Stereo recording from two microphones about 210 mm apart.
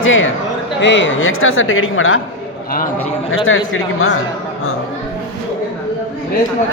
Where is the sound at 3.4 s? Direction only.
70° left (ahead or behind).